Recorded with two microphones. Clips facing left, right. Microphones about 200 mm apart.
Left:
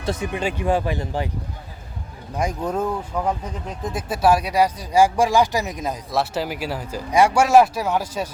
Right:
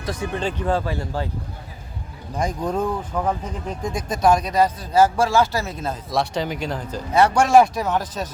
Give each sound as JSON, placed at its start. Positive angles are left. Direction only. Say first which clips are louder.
{"t": 0.0, "sound": "speech", "louder": "left 2 dB", "side_deg": 25}
{"t": 0.3, "sound": "speech", "louder": "even", "side_deg": 10}
{"t": 2.3, "sound": "speech", "louder": "even", "side_deg": 10}
{"t": 6.1, "sound": "speech", "louder": "right 1 dB", "side_deg": 5}